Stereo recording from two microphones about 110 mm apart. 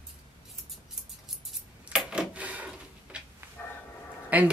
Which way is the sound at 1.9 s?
5° right (ahead or behind).